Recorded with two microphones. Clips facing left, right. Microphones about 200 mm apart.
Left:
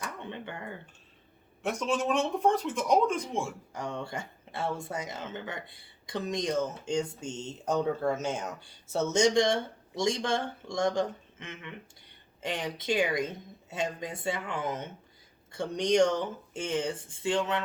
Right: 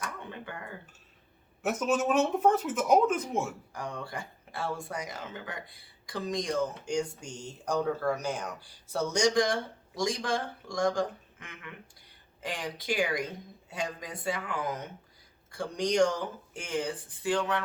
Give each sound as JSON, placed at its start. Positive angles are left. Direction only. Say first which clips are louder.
{"t": 0.0, "sound": "a sound", "louder": "left 1 dB", "side_deg": 25}
{"t": 1.6, "sound": "speech", "louder": "right 2 dB", "side_deg": -5}
{"t": 3.8, "sound": "speech", "louder": "left 3 dB", "side_deg": 25}